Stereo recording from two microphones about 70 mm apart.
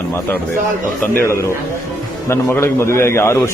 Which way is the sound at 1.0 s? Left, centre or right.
Left.